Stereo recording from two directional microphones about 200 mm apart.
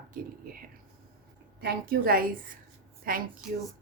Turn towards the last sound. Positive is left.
turn(degrees=-5)  # may be behind; listen again after turning